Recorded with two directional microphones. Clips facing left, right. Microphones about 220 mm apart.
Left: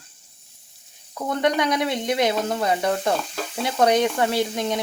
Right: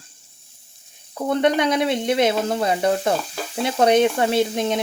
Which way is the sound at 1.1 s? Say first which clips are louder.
Right 3 dB; 30° right (ahead or behind).